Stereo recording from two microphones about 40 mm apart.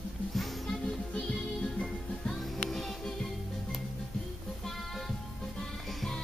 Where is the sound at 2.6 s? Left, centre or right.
Centre.